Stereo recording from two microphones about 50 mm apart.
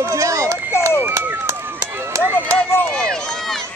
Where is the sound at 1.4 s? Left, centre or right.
Right.